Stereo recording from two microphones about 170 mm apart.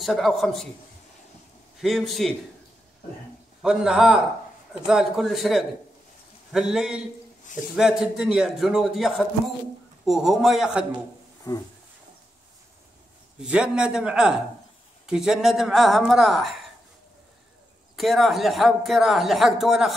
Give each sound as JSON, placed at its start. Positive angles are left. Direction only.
{"t": 0.0, "sound": "speech", "side_deg": 0}
{"t": 1.8, "sound": "speech", "side_deg": 0}
{"t": 3.6, "sound": "speech", "side_deg": -5}
{"t": 11.5, "sound": "a sound", "side_deg": 15}
{"t": 13.4, "sound": "speech", "side_deg": -5}
{"t": 17.9, "sound": "speech", "side_deg": 0}